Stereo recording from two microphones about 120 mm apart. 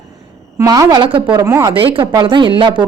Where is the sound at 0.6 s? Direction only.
25° right (ahead or behind).